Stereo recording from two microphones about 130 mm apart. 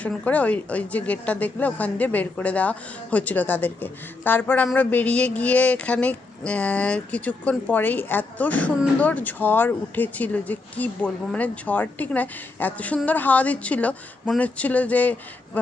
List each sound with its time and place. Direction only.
0.0 s a woman's voice: 10° left (ahead or behind)